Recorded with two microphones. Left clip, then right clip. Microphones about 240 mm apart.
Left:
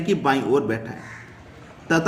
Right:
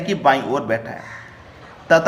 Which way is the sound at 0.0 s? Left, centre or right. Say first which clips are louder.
Right 4 dB; centre.